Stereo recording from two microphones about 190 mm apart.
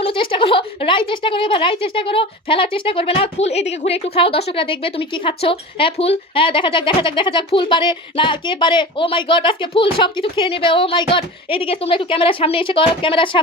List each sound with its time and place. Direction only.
0.0 s a woman's voice: 25° left (ahead or behind)